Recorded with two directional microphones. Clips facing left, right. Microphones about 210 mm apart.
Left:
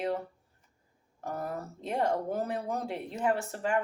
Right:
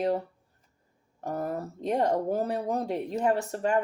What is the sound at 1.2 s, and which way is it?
Speech, 40° right (ahead or behind).